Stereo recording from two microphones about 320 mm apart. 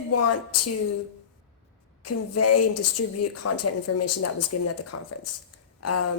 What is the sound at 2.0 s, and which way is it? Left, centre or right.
Speech, left.